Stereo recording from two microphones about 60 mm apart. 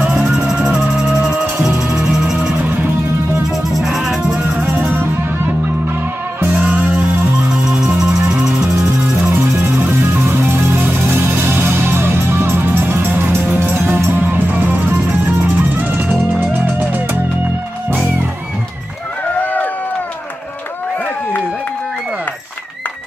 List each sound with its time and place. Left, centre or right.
0.5 s music: centre
3.7 s music: centre
6.6 s music: right
9.3 s music: right
19.4 s run: left